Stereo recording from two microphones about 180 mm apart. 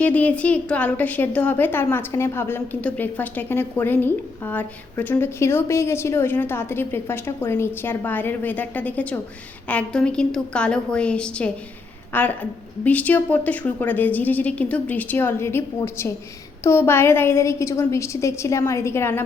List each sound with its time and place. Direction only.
0.0 s a woman's voice: 10° left (ahead or behind)